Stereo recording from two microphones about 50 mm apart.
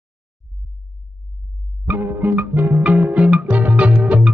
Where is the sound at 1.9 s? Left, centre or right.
Right.